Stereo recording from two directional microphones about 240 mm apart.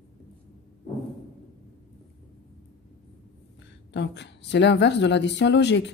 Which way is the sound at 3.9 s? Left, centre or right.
Left.